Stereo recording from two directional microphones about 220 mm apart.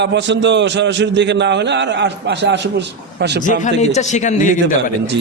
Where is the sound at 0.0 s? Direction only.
55° right (ahead or behind).